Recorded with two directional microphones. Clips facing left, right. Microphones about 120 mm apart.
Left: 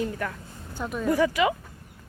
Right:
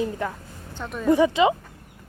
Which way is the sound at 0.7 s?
5° left (ahead or behind).